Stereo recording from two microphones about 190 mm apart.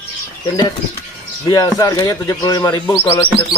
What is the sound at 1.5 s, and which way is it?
A man's voice, 20° left (ahead or behind).